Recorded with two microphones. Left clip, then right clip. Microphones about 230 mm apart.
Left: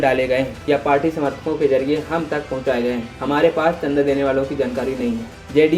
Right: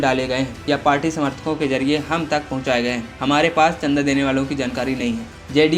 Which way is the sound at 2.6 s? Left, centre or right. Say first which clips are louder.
Even; centre.